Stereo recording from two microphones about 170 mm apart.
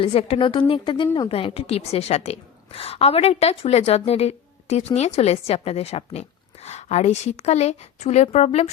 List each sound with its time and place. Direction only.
0.0 s a woman's voice: 35° left (ahead or behind)